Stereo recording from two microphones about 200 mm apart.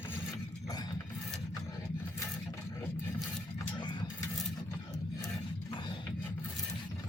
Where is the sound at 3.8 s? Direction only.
20° left (ahead or behind).